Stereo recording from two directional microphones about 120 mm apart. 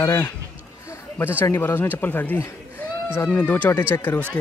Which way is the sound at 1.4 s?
20° left (ahead or behind).